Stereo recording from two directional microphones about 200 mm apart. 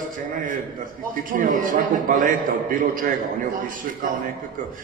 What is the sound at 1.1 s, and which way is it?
A man's voice, 40° right (ahead or behind).